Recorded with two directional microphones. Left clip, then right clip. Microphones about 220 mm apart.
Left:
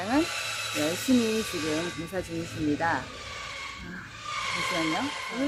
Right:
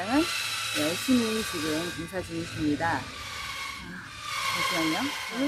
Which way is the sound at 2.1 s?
10° left (ahead or behind).